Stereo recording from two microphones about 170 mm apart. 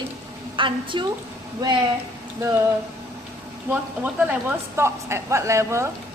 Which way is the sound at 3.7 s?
10° right (ahead or behind).